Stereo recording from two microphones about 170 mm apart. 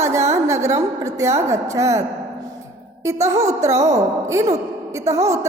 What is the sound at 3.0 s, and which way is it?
A woman's voice, 20° right (ahead or behind).